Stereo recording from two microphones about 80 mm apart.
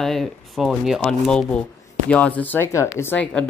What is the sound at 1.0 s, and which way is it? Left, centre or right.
Speech, centre.